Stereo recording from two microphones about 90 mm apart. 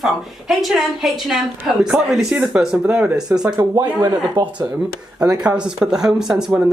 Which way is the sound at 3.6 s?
40° right (ahead or behind).